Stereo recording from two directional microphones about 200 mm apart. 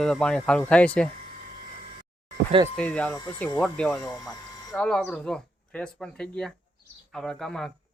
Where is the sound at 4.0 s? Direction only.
15° left (ahead or behind).